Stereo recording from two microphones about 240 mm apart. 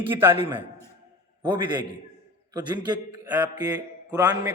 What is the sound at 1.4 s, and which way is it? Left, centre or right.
A man's voice, centre.